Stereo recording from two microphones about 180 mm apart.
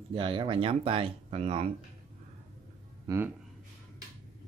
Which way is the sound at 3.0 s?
15° right (ahead or behind).